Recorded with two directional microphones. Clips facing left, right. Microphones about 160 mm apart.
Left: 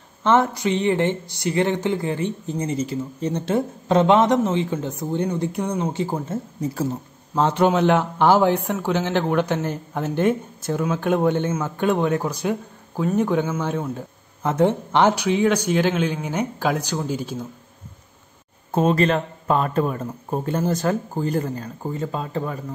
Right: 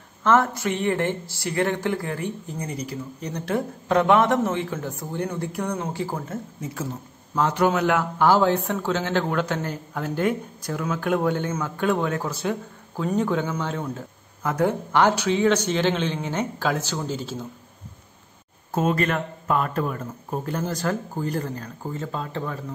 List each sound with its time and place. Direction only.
0.6 s speech: 20° left (ahead or behind)
18.7 s speech: 30° left (ahead or behind); by 22.6 s 15° left (ahead or behind)